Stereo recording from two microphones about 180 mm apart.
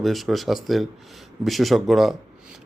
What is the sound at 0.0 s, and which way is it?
A man's voice, centre (ahead or behind).